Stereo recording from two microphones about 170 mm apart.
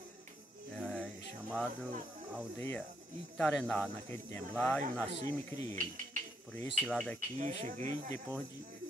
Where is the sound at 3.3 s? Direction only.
5° left (ahead or behind).